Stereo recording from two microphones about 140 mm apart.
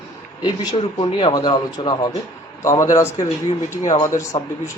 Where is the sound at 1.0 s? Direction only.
35° left (ahead or behind).